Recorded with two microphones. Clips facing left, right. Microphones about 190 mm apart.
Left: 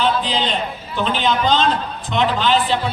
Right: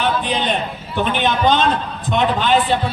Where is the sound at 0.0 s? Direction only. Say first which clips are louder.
Even; 60° right (ahead or behind).